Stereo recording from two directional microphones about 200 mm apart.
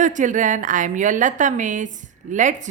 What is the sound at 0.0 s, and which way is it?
A woman's voice, 40° right (ahead or behind).